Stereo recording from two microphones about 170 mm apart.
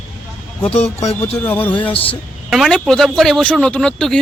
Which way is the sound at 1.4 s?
10° left (ahead or behind).